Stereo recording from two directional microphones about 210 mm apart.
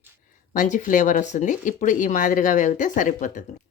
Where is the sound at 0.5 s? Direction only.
35° left (ahead or behind).